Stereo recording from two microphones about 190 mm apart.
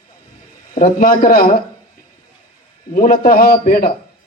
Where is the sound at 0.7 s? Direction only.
45° left (ahead or behind).